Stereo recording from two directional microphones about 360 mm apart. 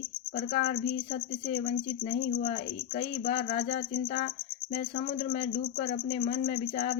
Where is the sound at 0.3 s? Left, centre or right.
Left.